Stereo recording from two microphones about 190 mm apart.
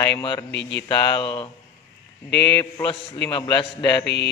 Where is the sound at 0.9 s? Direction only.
25° left (ahead or behind).